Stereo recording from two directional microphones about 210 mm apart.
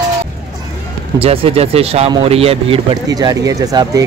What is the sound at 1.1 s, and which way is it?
Speech, 25° right (ahead or behind).